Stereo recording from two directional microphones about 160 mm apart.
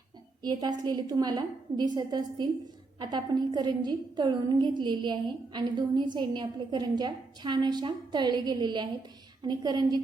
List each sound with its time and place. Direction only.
0.4 s a woman's voice: 25° right (ahead or behind)